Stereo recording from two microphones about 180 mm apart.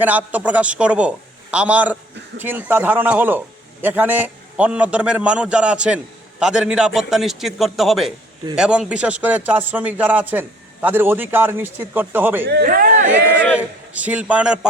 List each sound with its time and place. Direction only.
0.0 s speech: 10° right (ahead or behind)
12.5 s speech: 60° right (ahead or behind)
13.6 s speech: 10° right (ahead or behind)